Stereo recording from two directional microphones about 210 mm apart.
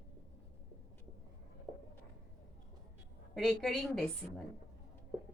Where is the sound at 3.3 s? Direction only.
Centre (ahead or behind).